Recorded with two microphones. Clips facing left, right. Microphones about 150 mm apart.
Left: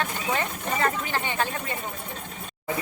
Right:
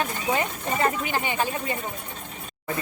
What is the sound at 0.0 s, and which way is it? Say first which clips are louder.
Speech: right 2 dB; 15° right (ahead or behind).